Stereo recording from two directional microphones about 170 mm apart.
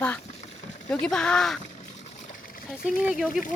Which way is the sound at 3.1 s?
Centre (ahead or behind).